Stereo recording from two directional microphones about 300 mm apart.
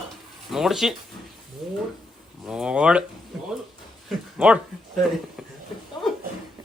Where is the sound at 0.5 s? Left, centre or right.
Centre.